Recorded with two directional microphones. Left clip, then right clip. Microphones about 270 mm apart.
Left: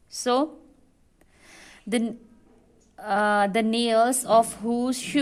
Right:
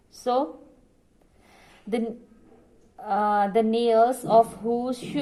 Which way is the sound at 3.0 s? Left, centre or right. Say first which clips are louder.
Left 1 dB; left.